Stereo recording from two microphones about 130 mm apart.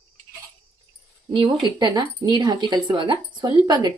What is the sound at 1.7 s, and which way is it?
Speech, 35° right (ahead or behind).